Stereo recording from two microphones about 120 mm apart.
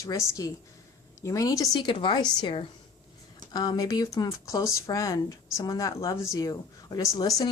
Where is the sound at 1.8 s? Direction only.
40° left (ahead or behind).